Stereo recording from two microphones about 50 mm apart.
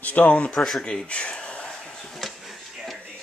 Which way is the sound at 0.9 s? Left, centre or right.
Left.